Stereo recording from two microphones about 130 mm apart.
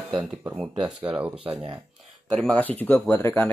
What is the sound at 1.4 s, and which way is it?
Speech, 45° right (ahead or behind).